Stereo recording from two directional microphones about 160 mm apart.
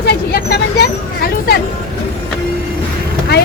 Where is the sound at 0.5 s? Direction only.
75° left (ahead or behind).